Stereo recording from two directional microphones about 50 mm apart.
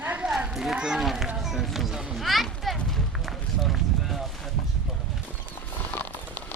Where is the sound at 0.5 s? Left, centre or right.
Centre.